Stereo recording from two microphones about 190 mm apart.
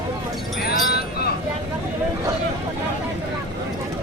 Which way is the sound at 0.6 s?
55° left (ahead or behind).